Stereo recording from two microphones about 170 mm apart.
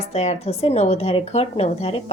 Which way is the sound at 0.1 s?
40° left (ahead or behind).